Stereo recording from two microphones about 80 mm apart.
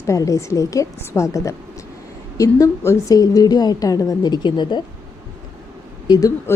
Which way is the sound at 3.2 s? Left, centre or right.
Left.